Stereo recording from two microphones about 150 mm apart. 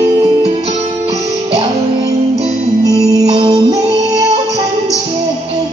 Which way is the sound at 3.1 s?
25° right (ahead or behind).